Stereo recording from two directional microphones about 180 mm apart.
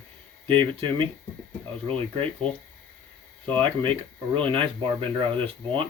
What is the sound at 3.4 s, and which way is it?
Speech, 10° left (ahead or behind).